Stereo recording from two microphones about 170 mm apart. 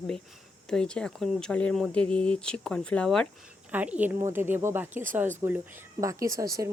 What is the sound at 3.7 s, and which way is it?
Speech, 10° right (ahead or behind).